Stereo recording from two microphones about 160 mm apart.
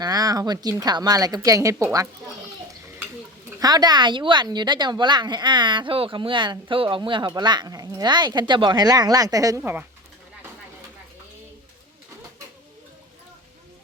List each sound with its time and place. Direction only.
0.0 s a woman's voice: 25° right (ahead or behind)
3.6 s a woman's voice: 25° right (ahead or behind)